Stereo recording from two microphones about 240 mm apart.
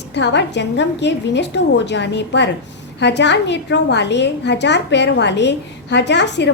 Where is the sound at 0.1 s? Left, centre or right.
Left.